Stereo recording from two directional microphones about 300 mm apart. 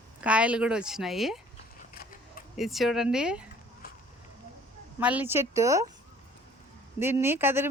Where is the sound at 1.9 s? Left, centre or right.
Left.